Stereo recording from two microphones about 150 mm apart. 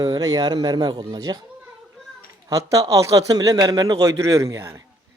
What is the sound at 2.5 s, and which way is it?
A man's voice, 20° right (ahead or behind).